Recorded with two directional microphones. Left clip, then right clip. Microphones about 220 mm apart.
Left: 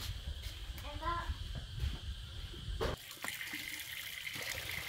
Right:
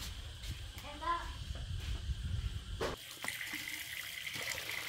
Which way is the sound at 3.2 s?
Centre (ahead or behind).